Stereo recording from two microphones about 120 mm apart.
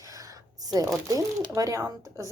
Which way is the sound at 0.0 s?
30° right (ahead or behind).